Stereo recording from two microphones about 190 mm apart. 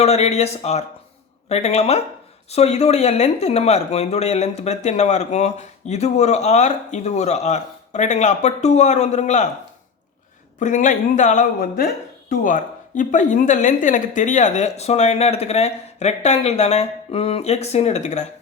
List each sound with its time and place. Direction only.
0.0 s speech: 35° left (ahead or behind)
10.6 s speech: 40° left (ahead or behind)